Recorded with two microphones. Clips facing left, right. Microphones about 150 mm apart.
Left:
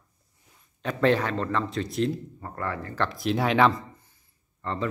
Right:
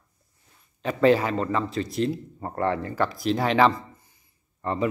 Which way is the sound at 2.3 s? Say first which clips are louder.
Right 7 dB; 30° right (ahead or behind).